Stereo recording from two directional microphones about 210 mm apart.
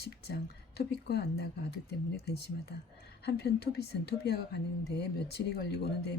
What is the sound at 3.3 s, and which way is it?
Speech, 50° left (ahead or behind).